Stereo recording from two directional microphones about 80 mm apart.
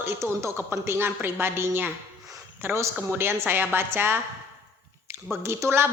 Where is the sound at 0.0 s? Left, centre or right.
Right.